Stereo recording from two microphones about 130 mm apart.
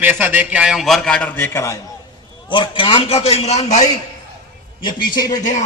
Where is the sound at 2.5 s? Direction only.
40° left (ahead or behind); by 3.9 s 60° left (ahead or behind).